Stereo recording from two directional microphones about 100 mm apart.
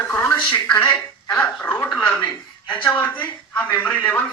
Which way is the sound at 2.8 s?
15° left (ahead or behind).